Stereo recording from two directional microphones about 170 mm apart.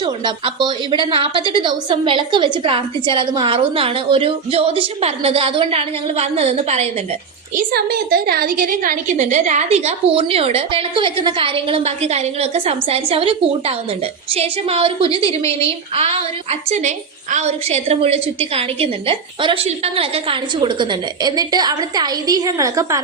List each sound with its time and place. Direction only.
0.0 s a woman's voice: 25° right (ahead or behind)
7.5 s a woman's voice: 65° right (ahead or behind); by 23.0 s 20° right (ahead or behind)